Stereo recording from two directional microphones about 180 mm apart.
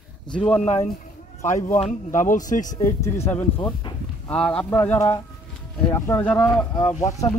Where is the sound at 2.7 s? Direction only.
15° left (ahead or behind).